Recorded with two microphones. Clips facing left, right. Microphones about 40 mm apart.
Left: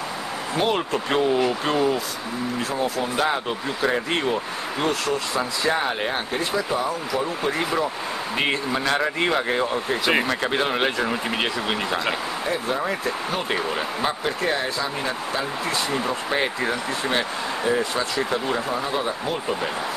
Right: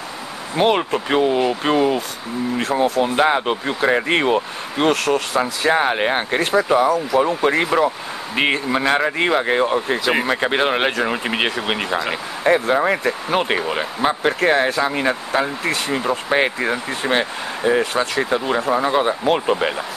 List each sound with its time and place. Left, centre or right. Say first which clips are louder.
0.6 s speech: right 6 dB; right
0.9 s speech: right 3 dB; centre
2.6 s speech: right 8 dB; right
5.7 s speech: right 7 dB; right
6.4 s speech: right 10 dB; right
8.4 s speech: right 6 dB; right
12.4 s speech: right 10 dB; right
13.6 s speech: right 4 dB; right
14.2 s speech: right 7 dB; right
15.9 s speech: right 5 dB; right
18.9 s speech: right 7 dB; right
19.2 s speech: right 8 dB; right